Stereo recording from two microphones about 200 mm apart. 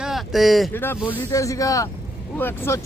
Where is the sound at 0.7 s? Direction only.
10° left (ahead or behind).